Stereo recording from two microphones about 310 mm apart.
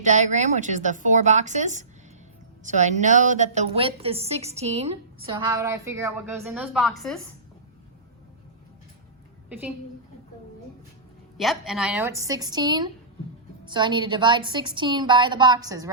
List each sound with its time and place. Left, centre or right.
0.0 s a woman's voice: right; by 7.2 s centre
11.3 s a woman's voice: centre